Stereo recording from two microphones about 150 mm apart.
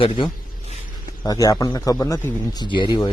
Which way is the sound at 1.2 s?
25° left (ahead or behind).